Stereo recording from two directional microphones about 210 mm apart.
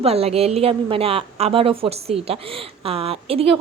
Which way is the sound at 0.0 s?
30° right (ahead or behind).